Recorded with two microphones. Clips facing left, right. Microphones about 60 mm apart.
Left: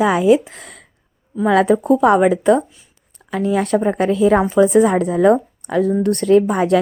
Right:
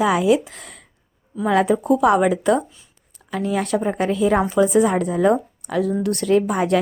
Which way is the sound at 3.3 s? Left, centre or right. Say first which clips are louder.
Left 4 dB; left.